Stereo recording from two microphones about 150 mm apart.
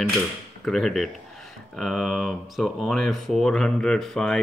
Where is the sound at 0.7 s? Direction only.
Centre (ahead or behind).